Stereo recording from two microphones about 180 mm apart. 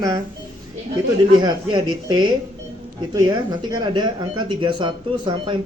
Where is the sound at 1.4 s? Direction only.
25° right (ahead or behind).